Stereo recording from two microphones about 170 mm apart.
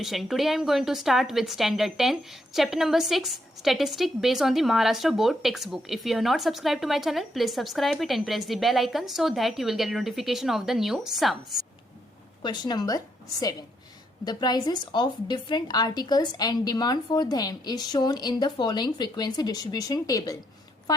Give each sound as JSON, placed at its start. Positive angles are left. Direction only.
{"t": 0.0, "sound": "a woman's voice", "side_deg": 0}
{"t": 12.4, "sound": "a woman's voice", "side_deg": 25}
{"t": 14.3, "sound": "a woman's voice", "side_deg": 25}